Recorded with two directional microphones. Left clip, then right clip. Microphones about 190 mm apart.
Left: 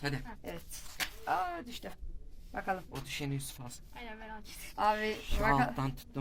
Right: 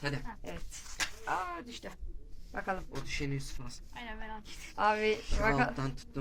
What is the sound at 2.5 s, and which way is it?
Speech, centre (ahead or behind).